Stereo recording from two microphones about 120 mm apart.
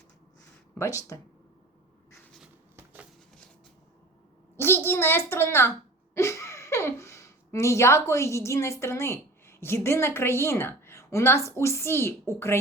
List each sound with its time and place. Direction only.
0.8 s speech: 25° left (ahead or behind)
2.7 s a sound: 15° right (ahead or behind)
4.5 s a child's voice: 20° left (ahead or behind)